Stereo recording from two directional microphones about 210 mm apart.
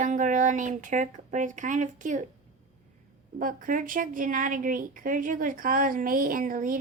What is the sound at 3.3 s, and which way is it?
A woman's voice, 40° right (ahead or behind).